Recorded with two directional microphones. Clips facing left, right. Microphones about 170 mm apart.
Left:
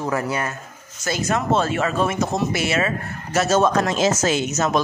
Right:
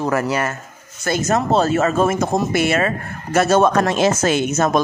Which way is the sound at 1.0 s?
50° right (ahead or behind).